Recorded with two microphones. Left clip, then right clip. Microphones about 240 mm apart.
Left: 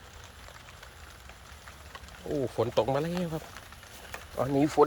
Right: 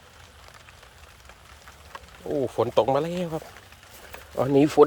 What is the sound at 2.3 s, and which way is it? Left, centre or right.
Speech, right.